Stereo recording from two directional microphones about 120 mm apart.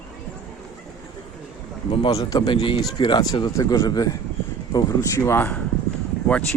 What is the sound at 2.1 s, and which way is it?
Speech, 30° left (ahead or behind).